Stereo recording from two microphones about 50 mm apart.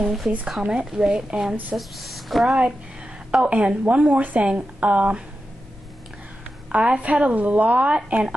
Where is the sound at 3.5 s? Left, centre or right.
Right.